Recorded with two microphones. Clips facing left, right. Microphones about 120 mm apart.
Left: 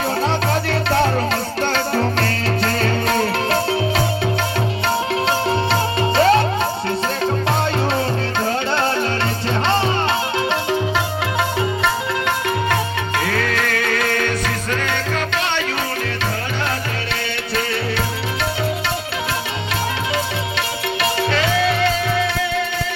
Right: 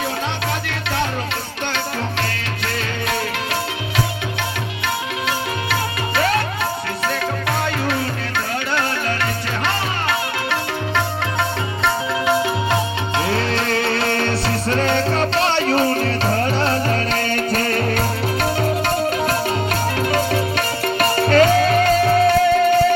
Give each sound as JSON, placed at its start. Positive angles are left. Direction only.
{"t": 3.1, "sound": "music", "side_deg": 40}
{"t": 6.1, "sound": "music", "side_deg": 30}
{"t": 13.2, "sound": "music", "side_deg": -25}
{"t": 20.6, "sound": "music", "side_deg": -45}